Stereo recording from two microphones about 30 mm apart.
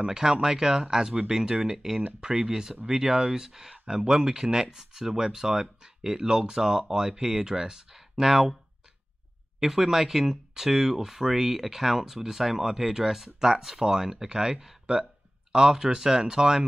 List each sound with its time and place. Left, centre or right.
0.0 s speech: right
7.9 s speech: centre
9.6 s speech: centre